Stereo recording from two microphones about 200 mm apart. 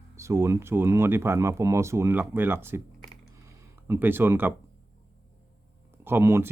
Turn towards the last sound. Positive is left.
turn(degrees=-10)  # may be behind; listen again after turning